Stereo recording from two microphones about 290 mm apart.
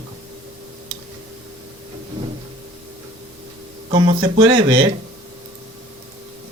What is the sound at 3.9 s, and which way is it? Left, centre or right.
Speech, right.